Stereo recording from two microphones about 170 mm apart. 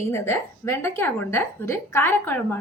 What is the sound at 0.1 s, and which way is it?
A woman's voice, 15° left (ahead or behind).